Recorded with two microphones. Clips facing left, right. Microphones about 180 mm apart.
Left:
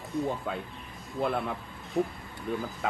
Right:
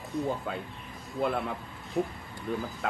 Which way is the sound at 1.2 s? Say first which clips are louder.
Even; centre (ahead or behind).